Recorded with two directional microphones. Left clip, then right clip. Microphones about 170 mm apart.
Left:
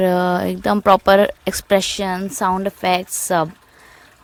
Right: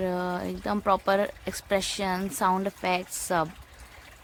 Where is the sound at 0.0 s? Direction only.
50° left (ahead or behind).